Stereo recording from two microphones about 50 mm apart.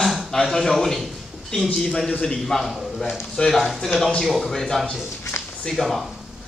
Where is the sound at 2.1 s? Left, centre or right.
Centre.